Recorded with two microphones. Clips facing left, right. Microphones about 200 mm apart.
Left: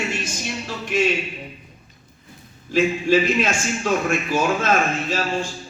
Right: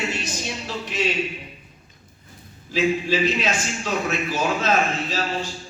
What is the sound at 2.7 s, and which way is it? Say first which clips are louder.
A man's voice: left 3 dB; 50° left (ahead or behind).